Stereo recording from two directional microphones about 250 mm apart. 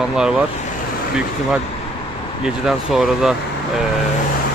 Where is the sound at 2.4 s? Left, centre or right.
Centre.